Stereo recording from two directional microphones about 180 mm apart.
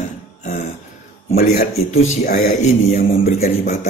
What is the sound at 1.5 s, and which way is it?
A man's voice, 40° left (ahead or behind).